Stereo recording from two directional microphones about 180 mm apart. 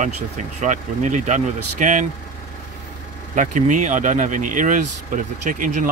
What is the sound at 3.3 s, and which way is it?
Speech, 45° right (ahead or behind).